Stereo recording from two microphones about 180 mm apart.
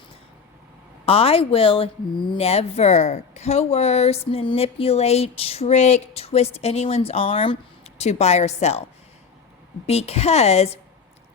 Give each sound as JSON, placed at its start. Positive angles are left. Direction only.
{"t": 1.0, "sound": "speech", "side_deg": 35}
{"t": 9.8, "sound": "speech", "side_deg": 35}